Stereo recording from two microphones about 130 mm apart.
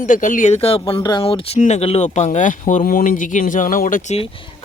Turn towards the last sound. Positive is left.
turn(degrees=90)